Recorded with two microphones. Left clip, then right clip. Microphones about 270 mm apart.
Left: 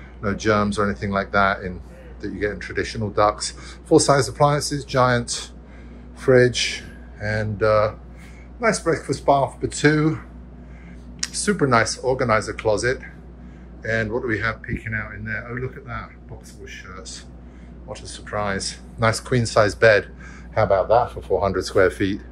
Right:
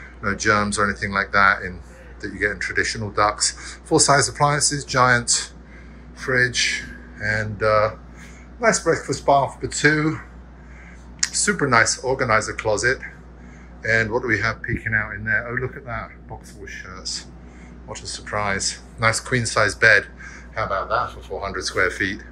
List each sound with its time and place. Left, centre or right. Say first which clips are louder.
0.2 s speech: right 1 dB; centre
6.1 s speech: left 3 dB; centre
7.2 s speech: right 1 dB; centre
14.1 s speech: right 2 dB; centre
14.9 s speech: right 7 dB; left
18.0 s speech: right 2 dB; centre
20.5 s speech: left 6 dB; centre